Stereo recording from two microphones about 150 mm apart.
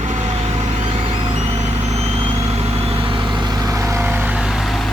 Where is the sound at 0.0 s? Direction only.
45° right (ahead or behind).